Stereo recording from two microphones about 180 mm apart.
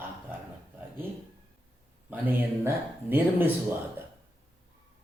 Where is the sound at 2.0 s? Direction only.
10° right (ahead or behind).